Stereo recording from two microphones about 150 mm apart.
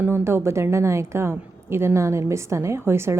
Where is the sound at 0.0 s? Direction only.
15° right (ahead or behind).